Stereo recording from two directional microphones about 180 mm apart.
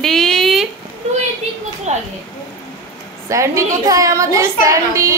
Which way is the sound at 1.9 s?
40° right (ahead or behind).